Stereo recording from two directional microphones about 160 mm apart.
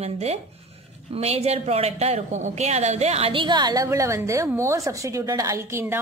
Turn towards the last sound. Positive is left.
turn(degrees=-15)  # may be behind; listen again after turning